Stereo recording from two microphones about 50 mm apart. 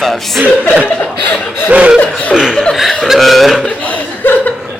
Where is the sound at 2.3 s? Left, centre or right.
Centre.